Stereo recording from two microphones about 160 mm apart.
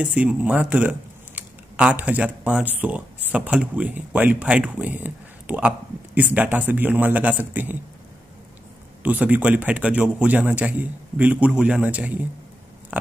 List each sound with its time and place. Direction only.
0.0 s speech: 10° right (ahead or behind)
9.0 s speech: 10° right (ahead or behind)
12.9 s pig: 10° right (ahead or behind)